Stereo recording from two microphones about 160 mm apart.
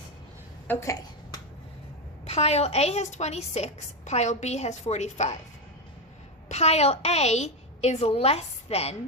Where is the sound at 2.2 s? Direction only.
40° left (ahead or behind).